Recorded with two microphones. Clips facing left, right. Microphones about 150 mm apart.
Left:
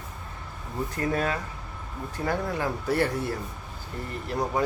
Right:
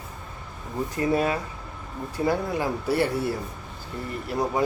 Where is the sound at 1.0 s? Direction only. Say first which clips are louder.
Right 4 dB; 15° right (ahead or behind).